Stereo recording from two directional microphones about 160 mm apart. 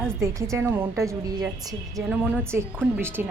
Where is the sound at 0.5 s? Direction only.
15° right (ahead or behind).